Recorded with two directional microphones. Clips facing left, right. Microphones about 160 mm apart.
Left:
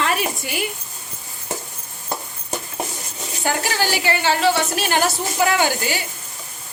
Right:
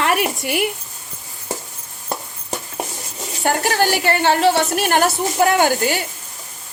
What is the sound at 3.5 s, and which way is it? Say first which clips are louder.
A woman's voice: right 4 dB; 55° right (ahead or behind).